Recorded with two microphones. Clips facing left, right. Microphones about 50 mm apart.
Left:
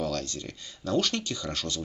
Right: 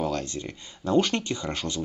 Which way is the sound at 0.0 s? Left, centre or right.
Right.